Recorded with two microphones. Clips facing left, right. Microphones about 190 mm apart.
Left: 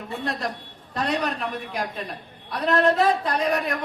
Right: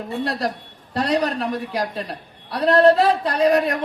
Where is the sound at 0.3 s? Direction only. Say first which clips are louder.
Right 4 dB; 35° right (ahead or behind).